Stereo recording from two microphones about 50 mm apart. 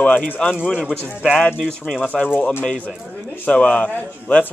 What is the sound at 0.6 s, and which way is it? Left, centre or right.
Speech, left.